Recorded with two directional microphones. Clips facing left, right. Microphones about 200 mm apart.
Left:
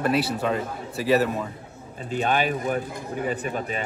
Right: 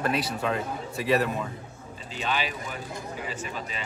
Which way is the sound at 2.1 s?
50° left (ahead or behind).